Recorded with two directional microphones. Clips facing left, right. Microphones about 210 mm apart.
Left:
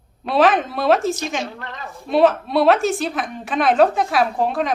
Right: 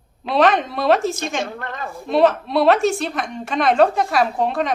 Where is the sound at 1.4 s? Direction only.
50° right (ahead or behind).